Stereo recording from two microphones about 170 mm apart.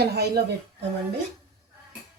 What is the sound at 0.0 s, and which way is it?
Speech, 70° right (ahead or behind).